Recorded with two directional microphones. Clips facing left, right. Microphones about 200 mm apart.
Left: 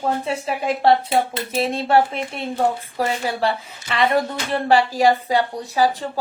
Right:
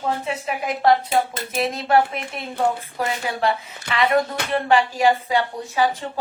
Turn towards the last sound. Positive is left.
turn(degrees=35)  # may be behind; listen again after turning